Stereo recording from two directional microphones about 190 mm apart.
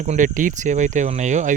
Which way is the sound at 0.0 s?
40° right (ahead or behind).